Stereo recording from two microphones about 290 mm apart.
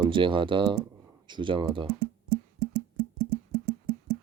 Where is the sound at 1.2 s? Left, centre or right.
Centre.